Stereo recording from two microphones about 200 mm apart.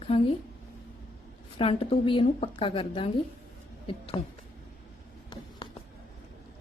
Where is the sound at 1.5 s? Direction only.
25° left (ahead or behind).